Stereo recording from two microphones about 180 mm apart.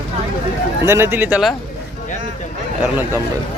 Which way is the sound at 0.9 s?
15° right (ahead or behind).